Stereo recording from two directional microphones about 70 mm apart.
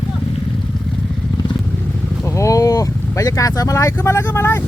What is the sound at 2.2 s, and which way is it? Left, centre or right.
Vehicle, left.